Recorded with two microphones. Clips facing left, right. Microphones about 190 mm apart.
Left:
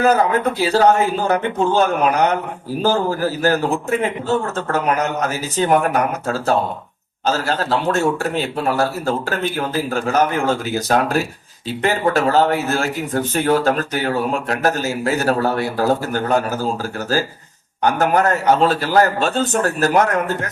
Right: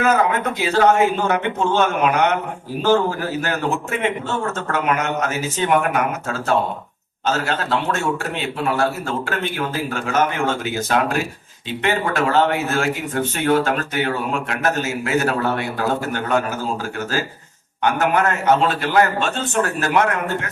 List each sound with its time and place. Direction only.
0.0 s a man's voice: 35° left (ahead or behind)
17.8 s a man's voice: 35° left (ahead or behind)